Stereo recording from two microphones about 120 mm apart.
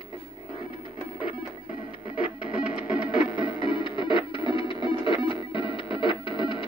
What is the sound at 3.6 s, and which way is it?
Music, 45° left (ahead or behind).